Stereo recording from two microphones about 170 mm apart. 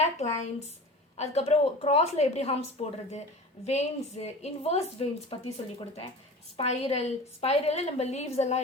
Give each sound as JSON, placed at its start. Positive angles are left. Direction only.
{"t": 0.0, "sound": "a woman's voice", "side_deg": 40}
{"t": 6.6, "sound": "a woman's voice", "side_deg": 40}